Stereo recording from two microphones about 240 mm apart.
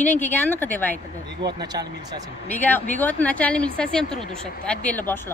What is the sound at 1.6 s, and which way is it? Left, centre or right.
Speech, centre.